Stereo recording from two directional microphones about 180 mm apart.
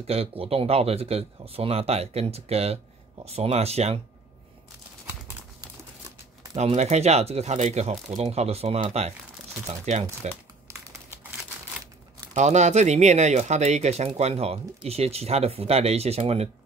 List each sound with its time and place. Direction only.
0.0 s speech: 35° right (ahead or behind)
6.5 s speech: 35° right (ahead or behind)
12.4 s speech: 40° right (ahead or behind)